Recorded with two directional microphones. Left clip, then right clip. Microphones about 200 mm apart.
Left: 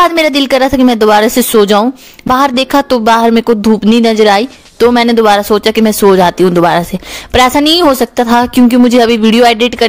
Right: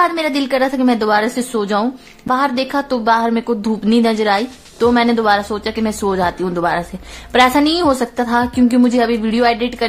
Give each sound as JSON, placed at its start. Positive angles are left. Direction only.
{"t": 0.0, "sound": "a woman's voice", "side_deg": 45}